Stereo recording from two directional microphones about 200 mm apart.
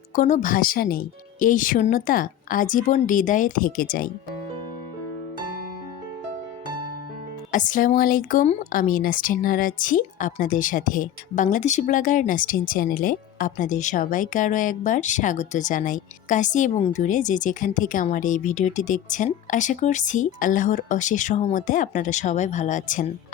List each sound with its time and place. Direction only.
0.2 s speech: 40° left (ahead or behind)
7.5 s speech: 40° left (ahead or behind)